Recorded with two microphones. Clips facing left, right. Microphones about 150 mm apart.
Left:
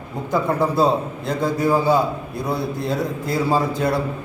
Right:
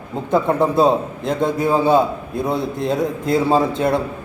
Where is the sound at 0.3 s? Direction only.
20° right (ahead or behind).